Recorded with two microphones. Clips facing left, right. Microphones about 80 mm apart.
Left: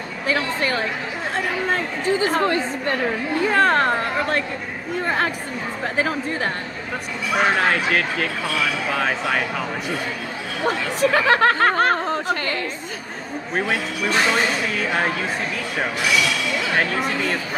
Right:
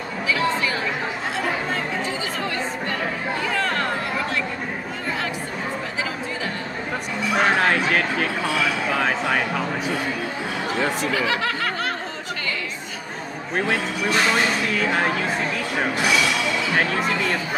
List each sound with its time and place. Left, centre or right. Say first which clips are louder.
0.3 s speech: left 1 dB; left
1.3 s chatter: left 4 dB; left
3.4 s a sound: left 8 dB; left
5.9 s speech: left 5 dB; left
7.3 s speech: even; centre
11.1 s a sound: left 6 dB; left
14.1 s speech: left 1 dB; centre
16.7 s speech: left 1 dB; centre